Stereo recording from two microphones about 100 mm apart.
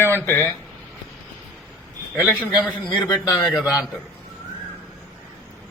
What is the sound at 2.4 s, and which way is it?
Speech, 15° right (ahead or behind).